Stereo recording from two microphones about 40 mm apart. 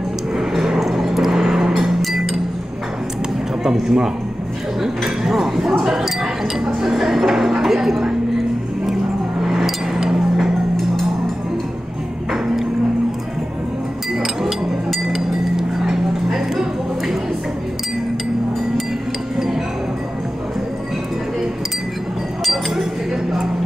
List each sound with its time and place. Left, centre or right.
0.5 s a sound: centre
1.1 s vehicle: centre
2.0 s music: centre
3.6 s a man's voice: centre
5.0 s a sound: centre
6.6 s chink: centre
9.6 s a sound: centre
10.1 s music: centre
14.4 s chink: centre
22.4 s chink: centre